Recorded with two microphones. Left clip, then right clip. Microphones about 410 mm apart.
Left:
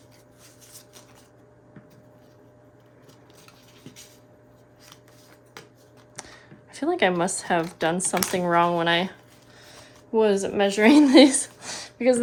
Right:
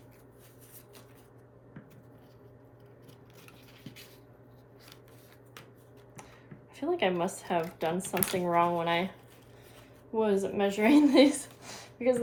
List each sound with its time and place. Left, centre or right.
6.2 s a sound: centre
6.7 s speech: centre
10.1 s speech: left